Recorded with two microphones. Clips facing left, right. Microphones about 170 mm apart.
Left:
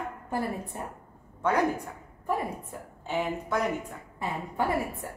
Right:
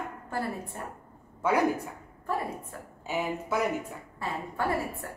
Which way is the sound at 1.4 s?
5° right (ahead or behind).